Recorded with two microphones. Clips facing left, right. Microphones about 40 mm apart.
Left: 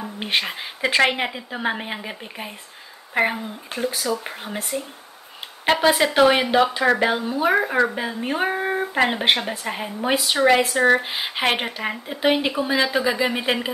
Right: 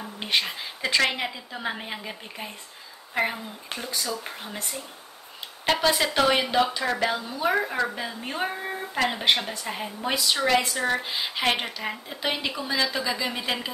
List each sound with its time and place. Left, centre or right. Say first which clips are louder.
0.2 s speech: left 2 dB; left
3.9 s speech: left 2 dB; left
4.2 s speech: left 5 dB; left
5.7 s speech: left 5 dB; left
9.8 s speech: left 5 dB; centre